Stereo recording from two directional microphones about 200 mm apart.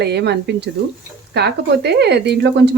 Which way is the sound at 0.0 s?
55° right (ahead or behind).